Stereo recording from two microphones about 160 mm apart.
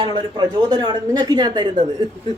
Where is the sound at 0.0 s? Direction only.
30° right (ahead or behind).